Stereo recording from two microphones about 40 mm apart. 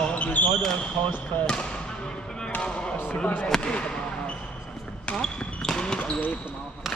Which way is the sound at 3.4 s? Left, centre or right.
Centre.